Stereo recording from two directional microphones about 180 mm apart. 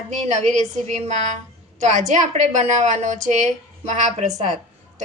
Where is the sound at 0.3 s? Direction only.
40° right (ahead or behind).